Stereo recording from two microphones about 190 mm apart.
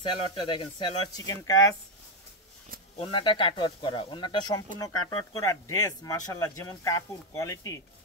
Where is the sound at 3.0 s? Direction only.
25° left (ahead or behind).